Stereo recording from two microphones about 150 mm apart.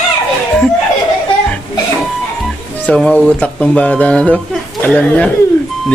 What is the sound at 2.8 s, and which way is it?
Speech, 5° left (ahead or behind).